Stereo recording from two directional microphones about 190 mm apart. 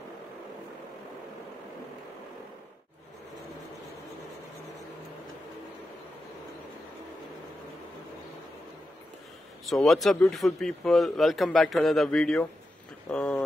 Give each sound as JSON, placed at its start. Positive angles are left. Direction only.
{"t": 9.7, "sound": "speech", "side_deg": 0}